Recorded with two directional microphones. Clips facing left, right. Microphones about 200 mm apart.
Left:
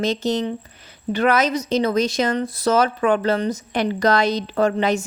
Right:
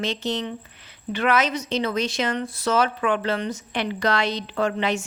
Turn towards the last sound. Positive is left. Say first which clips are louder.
# left 5 dB
turn(degrees=40)  # may be behind; listen again after turning